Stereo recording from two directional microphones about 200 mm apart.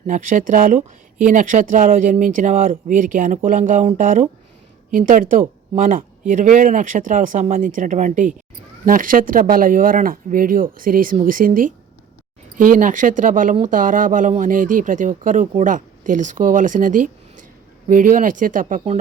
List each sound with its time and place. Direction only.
0.1 s speech: 40° right (ahead or behind)